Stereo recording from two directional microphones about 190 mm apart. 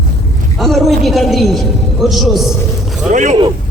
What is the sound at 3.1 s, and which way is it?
Speech, 40° right (ahead or behind).